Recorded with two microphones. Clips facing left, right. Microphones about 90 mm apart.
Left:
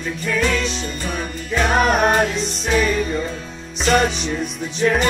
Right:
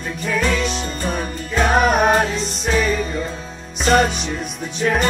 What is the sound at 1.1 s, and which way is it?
Music, centre (ahead or behind).